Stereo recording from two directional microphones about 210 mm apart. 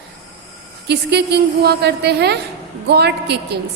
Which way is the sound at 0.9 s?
50° right (ahead or behind).